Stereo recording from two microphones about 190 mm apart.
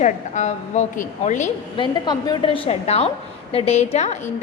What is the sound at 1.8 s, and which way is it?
A woman's voice, 25° left (ahead or behind).